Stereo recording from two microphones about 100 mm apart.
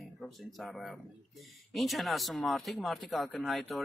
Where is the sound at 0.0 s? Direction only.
Centre (ahead or behind).